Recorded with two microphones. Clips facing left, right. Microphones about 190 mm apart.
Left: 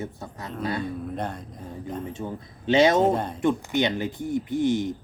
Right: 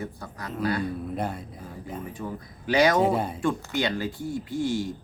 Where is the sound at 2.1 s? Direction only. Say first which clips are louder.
Left 2 dB; 25° left (ahead or behind).